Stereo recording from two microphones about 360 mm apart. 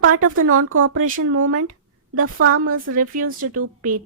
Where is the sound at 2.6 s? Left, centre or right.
Right.